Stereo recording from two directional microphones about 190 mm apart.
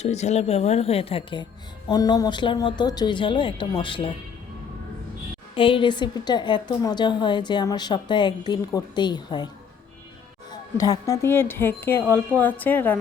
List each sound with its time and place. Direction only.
0.0 s a woman's voice: 35° left (ahead or behind)
5.5 s a woman's voice: 25° left (ahead or behind)
10.8 s speech: 20° left (ahead or behind)